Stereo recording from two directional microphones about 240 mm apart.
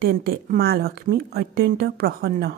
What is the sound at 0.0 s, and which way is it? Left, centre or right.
Speech, right.